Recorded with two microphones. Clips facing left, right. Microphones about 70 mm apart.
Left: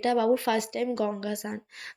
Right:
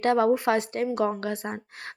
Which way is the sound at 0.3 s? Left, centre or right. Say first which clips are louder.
Right 2 dB; right.